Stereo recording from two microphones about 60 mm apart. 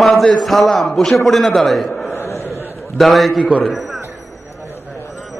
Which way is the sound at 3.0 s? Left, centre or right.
Centre.